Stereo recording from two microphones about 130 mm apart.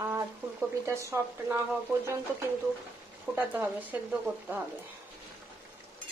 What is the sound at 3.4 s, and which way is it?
Speech, 15° right (ahead or behind).